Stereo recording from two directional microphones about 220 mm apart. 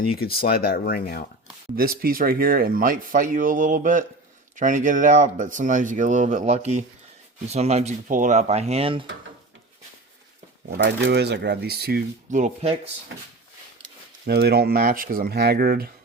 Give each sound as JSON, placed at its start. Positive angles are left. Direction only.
{"t": 0.4, "sound": "speech", "side_deg": 45}
{"t": 1.7, "sound": "speech", "side_deg": -40}
{"t": 10.7, "sound": "speech", "side_deg": -50}
{"t": 14.3, "sound": "speech", "side_deg": -45}